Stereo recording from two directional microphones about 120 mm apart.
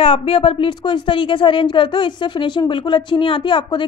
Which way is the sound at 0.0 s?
50° left (ahead or behind).